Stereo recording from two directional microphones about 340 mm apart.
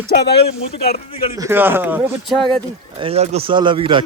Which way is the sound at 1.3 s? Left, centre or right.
Centre.